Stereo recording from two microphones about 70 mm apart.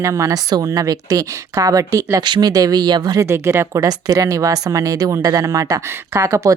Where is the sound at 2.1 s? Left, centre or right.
Right.